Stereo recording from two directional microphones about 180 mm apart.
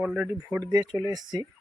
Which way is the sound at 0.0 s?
10° right (ahead or behind).